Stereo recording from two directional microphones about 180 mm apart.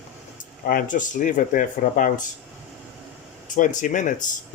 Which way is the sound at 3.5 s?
45° left (ahead or behind).